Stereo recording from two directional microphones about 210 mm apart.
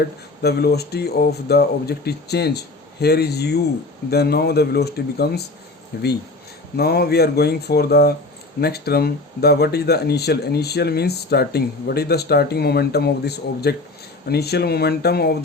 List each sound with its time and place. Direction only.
0.4 s speech: 50° left (ahead or behind)